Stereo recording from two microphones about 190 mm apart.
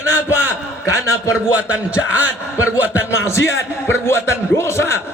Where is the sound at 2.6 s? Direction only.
10° right (ahead or behind).